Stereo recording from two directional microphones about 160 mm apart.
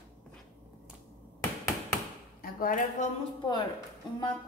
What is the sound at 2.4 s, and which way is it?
Speech, 60° left (ahead or behind).